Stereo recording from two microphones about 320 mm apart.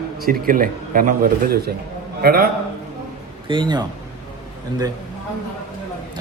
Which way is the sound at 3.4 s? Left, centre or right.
Centre.